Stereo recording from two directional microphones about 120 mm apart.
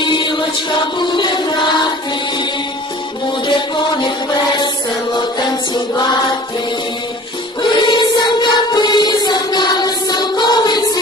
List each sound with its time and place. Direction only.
0.0 s music: 40° left (ahead or behind)
3.4 s music: 40° left (ahead or behind)
5.1 s music: 35° left (ahead or behind)
7.8 s music: 40° left (ahead or behind)